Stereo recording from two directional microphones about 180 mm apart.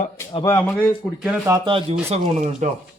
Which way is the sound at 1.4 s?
25° right (ahead or behind).